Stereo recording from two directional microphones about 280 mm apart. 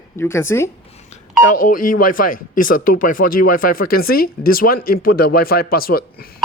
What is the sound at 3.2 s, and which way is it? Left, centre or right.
Speech, left.